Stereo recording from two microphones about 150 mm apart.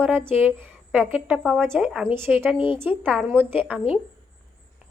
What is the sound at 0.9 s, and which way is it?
A woman's voice, centre (ahead or behind).